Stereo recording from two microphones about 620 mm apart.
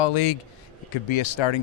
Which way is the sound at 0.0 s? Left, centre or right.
Left.